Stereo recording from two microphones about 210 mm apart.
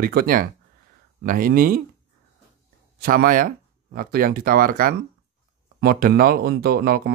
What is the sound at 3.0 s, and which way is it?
Speech, 45° right (ahead or behind).